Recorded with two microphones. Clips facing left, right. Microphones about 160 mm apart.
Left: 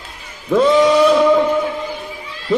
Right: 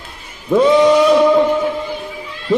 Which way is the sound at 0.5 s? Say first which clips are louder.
Right 1 dB; 15° right (ahead or behind).